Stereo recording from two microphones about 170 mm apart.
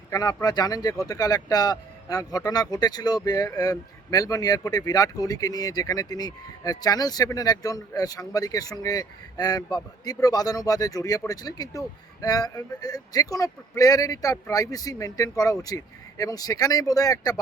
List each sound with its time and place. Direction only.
0.1 s speech: 20° left (ahead or behind)